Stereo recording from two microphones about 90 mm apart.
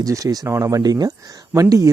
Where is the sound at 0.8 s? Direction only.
50° right (ahead or behind).